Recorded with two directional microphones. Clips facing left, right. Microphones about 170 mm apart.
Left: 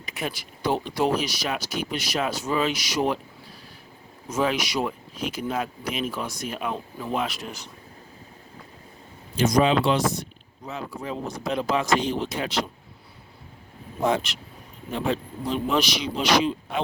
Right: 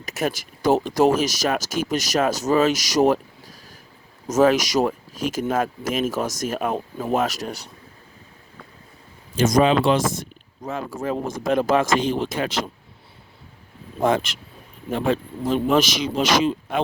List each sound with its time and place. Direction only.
0.0 s speech: 45° right (ahead or behind)
4.3 s speech: 40° right (ahead or behind)
9.3 s speech: 45° right (ahead or behind)
14.0 s speech: 50° right (ahead or behind)